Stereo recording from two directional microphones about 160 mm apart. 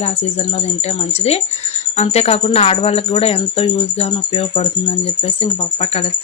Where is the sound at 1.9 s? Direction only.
40° left (ahead or behind).